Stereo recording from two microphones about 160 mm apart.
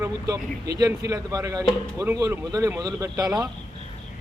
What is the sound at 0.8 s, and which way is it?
A man's voice, 20° right (ahead or behind).